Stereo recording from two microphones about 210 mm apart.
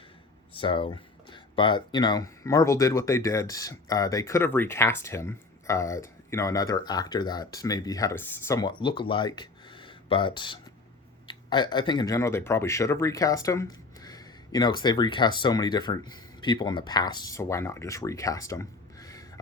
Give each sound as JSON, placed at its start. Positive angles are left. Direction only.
{"t": 0.5, "sound": "speech", "side_deg": 25}